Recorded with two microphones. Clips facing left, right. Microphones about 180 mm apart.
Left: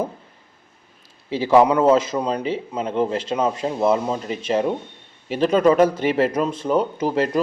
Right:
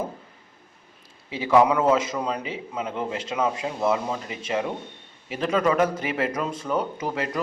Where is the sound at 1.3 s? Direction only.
30° left (ahead or behind).